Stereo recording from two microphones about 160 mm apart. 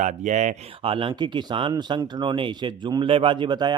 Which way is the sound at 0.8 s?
35° right (ahead or behind).